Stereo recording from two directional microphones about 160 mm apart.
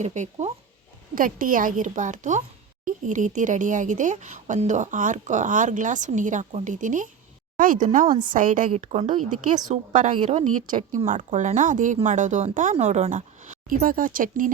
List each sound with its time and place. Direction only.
0.0 s speech: 45° right (ahead or behind)
1.1 s a woman's voice: 60° right (ahead or behind)
8.7 s speech: 45° right (ahead or behind)